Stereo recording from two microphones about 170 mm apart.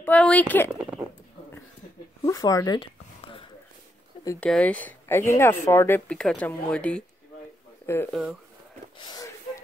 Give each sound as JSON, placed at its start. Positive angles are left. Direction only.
{"t": 0.0, "sound": "speech", "side_deg": 10}
{"t": 0.7, "sound": "speech", "side_deg": -5}
{"t": 2.2, "sound": "speech", "side_deg": 20}
{"t": 4.4, "sound": "speech", "side_deg": 5}
{"t": 8.1, "sound": "speech", "side_deg": 0}
{"t": 8.9, "sound": "gasp", "side_deg": 25}